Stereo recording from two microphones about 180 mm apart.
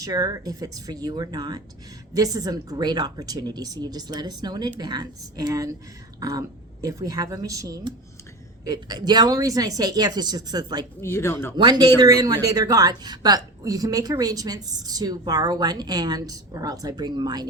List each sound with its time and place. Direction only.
0.0 s a woman's voice: 20° right (ahead or behind)
11.0 s speech: 15° left (ahead or behind)
11.5 s a woman's voice: 20° right (ahead or behind)